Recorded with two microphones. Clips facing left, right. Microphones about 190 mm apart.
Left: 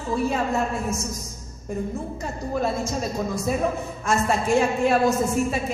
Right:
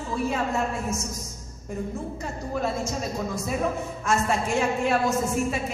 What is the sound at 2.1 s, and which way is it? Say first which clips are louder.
Speech: left 3 dB; 35° left (ahead or behind).